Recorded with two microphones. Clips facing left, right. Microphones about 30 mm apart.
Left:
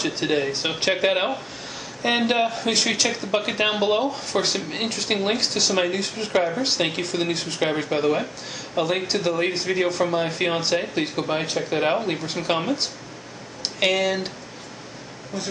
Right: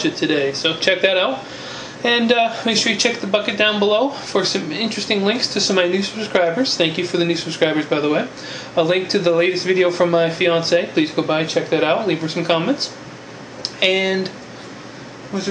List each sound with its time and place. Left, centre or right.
0.0 s speech: right
15.3 s speech: right